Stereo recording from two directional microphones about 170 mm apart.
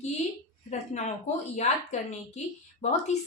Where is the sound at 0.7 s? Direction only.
40° left (ahead or behind).